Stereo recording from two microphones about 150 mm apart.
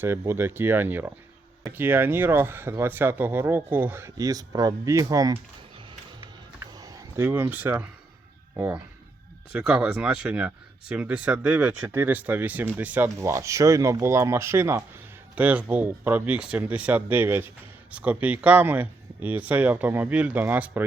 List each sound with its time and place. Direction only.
0.0 s speech: 15° right (ahead or behind)
6.6 s a sound: 25° right (ahead or behind)
7.5 s speech: 10° right (ahead or behind)